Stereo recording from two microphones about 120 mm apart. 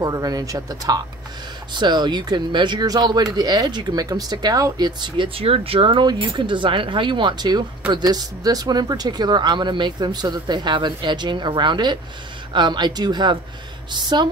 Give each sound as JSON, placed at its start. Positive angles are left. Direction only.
{"t": 0.0, "sound": "speech", "side_deg": -30}